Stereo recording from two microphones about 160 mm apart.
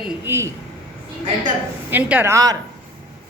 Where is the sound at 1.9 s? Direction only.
10° right (ahead or behind).